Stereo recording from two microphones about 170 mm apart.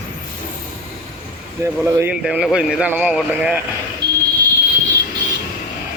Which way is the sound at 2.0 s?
Centre (ahead or behind).